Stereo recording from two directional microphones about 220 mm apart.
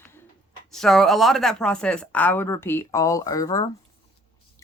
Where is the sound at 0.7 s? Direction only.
Centre (ahead or behind).